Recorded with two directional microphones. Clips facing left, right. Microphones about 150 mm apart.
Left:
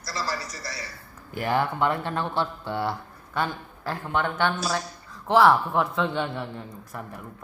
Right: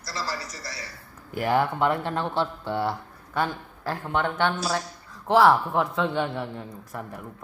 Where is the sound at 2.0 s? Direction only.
30° right (ahead or behind).